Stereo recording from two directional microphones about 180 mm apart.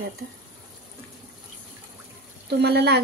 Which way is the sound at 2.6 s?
65° right (ahead or behind).